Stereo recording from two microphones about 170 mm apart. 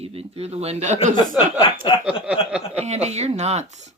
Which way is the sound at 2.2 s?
5° right (ahead or behind).